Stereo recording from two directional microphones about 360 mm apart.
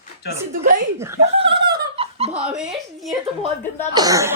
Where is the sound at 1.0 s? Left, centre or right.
Centre.